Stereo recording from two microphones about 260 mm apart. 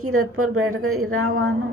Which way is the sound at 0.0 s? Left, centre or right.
Right.